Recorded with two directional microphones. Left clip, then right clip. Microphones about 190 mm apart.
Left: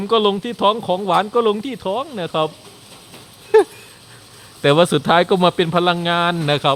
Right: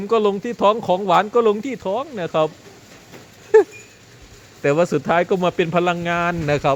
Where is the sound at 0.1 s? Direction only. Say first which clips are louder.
Left 1 dB; 10° left (ahead or behind).